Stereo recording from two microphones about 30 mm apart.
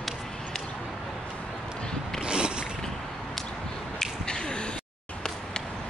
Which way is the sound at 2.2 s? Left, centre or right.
Right.